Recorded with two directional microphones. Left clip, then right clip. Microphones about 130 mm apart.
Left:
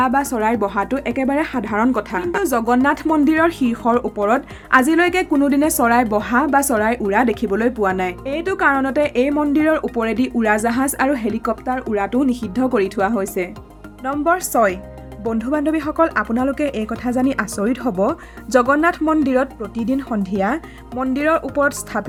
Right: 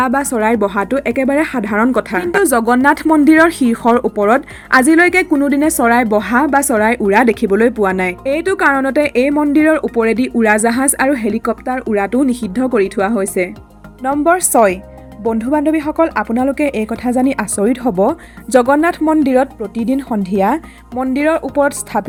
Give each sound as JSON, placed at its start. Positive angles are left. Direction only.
{"t": 0.0, "sound": "a woman's voice", "side_deg": -25}
{"t": 15.3, "sound": "speech", "side_deg": -25}